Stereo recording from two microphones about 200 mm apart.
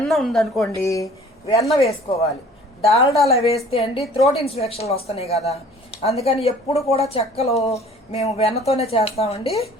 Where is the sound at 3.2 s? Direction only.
30° left (ahead or behind).